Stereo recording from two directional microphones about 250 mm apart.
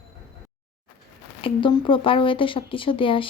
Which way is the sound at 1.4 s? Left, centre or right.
Left.